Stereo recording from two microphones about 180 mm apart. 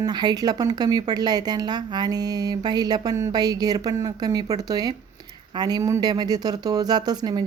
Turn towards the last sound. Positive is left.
turn(degrees=-25)  # may be behind; listen again after turning